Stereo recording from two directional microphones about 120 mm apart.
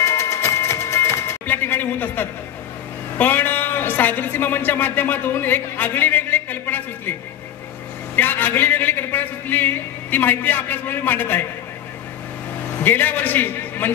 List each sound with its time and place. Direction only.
0.0 s printer: 25° left (ahead or behind)
3.2 s a man's voice: 15° left (ahead or behind)
8.2 s a man's voice: 15° left (ahead or behind)
12.8 s a man's voice: 15° left (ahead or behind)